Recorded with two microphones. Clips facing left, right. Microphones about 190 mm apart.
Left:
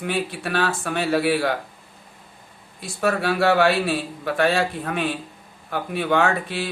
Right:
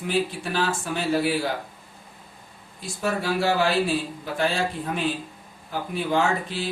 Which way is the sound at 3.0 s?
65° left (ahead or behind).